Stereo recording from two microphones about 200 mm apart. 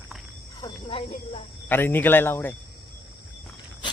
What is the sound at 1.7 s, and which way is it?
Speech, 10° left (ahead or behind).